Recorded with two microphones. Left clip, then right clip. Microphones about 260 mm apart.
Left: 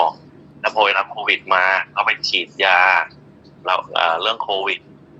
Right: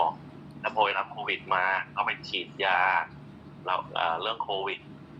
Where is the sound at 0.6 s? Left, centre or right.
Left.